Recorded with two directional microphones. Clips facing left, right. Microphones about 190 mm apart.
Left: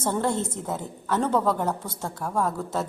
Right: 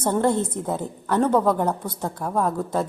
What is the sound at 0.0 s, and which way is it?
A woman's voice, 15° right (ahead or behind).